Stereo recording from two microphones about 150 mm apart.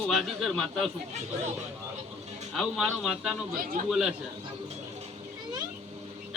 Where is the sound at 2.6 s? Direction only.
Centre (ahead or behind).